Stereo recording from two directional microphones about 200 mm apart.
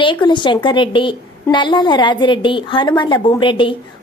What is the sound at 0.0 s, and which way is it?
A woman's voice, 25° left (ahead or behind).